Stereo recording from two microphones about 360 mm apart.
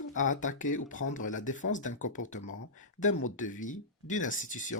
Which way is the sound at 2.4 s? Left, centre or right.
Left.